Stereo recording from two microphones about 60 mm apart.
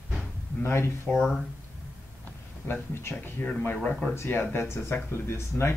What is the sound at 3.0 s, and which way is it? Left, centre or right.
Speech, left.